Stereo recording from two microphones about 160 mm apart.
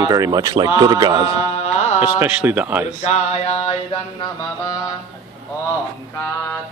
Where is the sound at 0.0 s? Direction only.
25° right (ahead or behind).